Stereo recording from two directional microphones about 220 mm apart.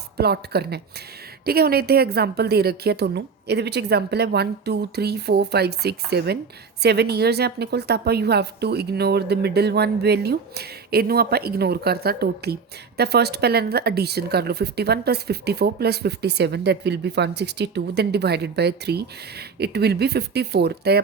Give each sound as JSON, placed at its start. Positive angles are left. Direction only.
{"t": 0.2, "sound": "speech", "side_deg": -45}